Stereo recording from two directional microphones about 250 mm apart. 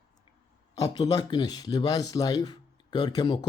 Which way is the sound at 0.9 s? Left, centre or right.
Centre.